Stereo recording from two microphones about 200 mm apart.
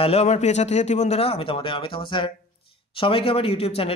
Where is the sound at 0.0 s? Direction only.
30° left (ahead or behind).